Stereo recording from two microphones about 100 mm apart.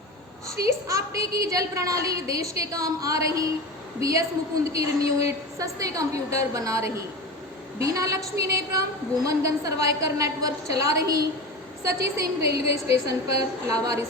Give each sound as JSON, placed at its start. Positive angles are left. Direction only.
{"t": 0.6, "sound": "a woman's voice", "side_deg": -35}